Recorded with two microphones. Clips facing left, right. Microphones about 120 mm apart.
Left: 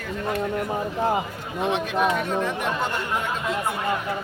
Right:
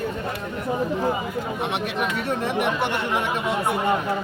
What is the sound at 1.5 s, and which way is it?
Speech, 65° right (ahead or behind).